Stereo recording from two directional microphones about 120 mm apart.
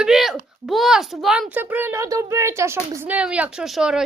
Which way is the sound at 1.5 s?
15° right (ahead or behind).